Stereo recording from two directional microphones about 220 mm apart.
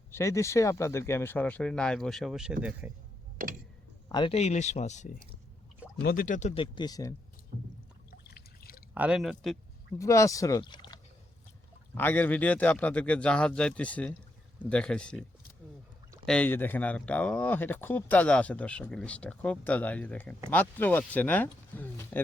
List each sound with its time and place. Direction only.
0.1 s speech: 10° left (ahead or behind); by 2.9 s 5° right (ahead or behind)
3.4 s tick: 40° right (ahead or behind)
4.1 s speech: 25° left (ahead or behind)
8.1 s drip: 45° left (ahead or behind)
9.0 s speech: 5° right (ahead or behind)
10.0 s speech: 15° left (ahead or behind)
11.9 s speech: 10° left (ahead or behind)
16.2 s speech: 5° left (ahead or behind)